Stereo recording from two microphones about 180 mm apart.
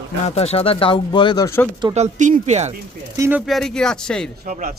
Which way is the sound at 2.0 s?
45° right (ahead or behind).